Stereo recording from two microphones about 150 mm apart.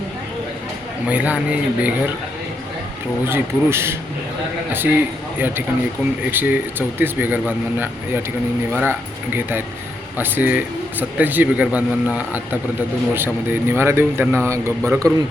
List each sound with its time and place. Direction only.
1.0 s speech: 10° right (ahead or behind)
3.2 s a man's voice: 15° right (ahead or behind)